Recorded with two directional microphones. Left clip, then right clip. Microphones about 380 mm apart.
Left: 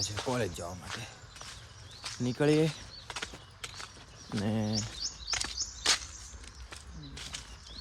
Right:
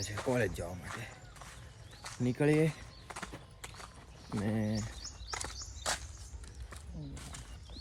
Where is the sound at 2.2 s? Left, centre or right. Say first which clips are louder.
Left 2 dB; centre.